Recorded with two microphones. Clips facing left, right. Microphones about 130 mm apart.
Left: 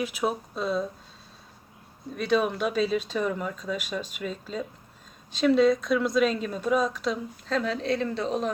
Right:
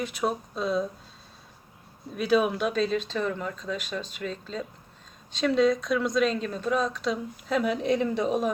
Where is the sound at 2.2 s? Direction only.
5° right (ahead or behind).